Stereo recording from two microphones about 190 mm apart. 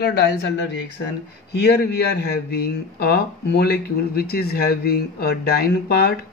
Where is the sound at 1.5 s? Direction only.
60° left (ahead or behind).